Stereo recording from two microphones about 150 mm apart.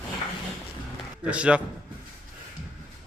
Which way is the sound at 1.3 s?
5° right (ahead or behind).